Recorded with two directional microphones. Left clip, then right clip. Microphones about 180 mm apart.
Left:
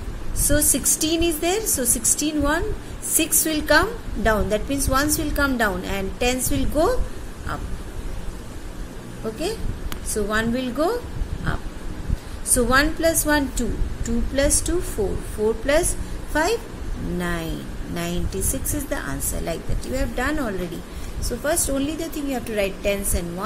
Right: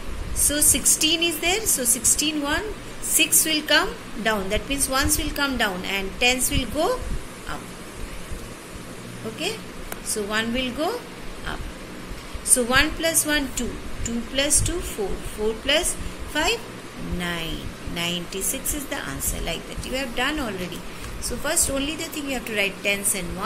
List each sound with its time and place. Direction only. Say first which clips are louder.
0.4 s a woman's voice: left 1 dB; 55° left (ahead or behind)
10.1 s a woman's voice: left 2 dB; 60° left (ahead or behind)
12.5 s a woman's voice: left 2 dB; 55° left (ahead or behind)
15.6 s a woman's voice: even; 55° left (ahead or behind)
17.2 s a woman's voice: even; 55° left (ahead or behind)